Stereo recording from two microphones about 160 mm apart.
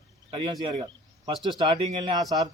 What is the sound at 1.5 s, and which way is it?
Speech, 30° right (ahead or behind).